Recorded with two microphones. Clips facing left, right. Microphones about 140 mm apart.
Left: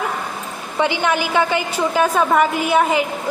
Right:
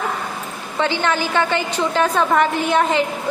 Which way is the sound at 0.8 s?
15° left (ahead or behind).